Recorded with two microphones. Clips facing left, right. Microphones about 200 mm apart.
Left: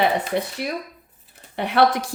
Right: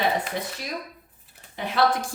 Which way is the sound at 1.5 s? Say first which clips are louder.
Left 4 dB; 65° left (ahead or behind).